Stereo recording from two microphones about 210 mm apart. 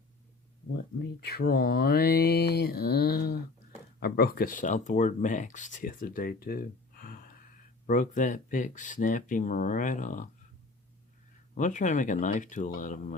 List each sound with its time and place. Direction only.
0.9 s speech: 45° left (ahead or behind)
11.5 s speech: 35° left (ahead or behind)